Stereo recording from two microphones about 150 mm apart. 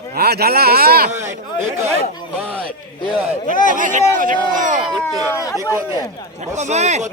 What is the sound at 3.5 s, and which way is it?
Speech, 60° left (ahead or behind).